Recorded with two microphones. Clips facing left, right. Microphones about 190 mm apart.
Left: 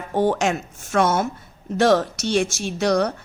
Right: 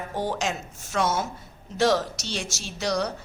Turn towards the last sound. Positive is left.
turn(degrees=55)  # may be behind; listen again after turning